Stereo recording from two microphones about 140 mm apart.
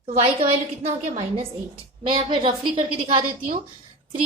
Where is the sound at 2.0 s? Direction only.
35° right (ahead or behind).